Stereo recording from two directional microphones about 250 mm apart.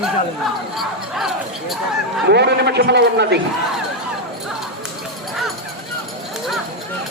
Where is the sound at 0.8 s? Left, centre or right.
Centre.